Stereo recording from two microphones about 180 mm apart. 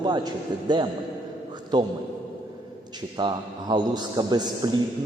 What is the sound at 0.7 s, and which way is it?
A man's voice, 25° right (ahead or behind).